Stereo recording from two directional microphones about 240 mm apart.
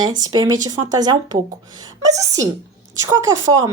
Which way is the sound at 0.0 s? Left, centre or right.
Centre.